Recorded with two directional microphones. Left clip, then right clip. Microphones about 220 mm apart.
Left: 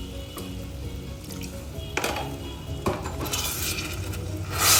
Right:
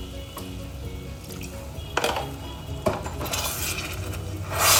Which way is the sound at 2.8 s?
Centre (ahead or behind).